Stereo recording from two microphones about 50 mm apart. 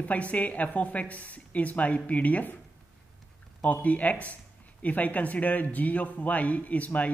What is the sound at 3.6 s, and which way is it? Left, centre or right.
Speech, left.